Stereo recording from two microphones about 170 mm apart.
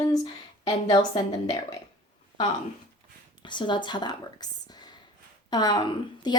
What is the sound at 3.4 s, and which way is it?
Speech, 25° left (ahead or behind).